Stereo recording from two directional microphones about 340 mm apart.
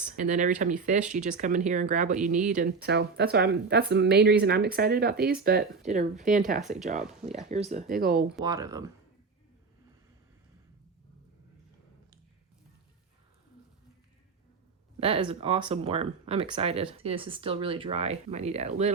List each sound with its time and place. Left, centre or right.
0.3 s speech: right
8.4 s speech: centre
15.0 s speech: centre